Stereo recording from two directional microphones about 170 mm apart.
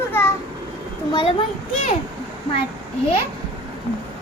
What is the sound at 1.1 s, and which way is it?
Speech, 30° left (ahead or behind).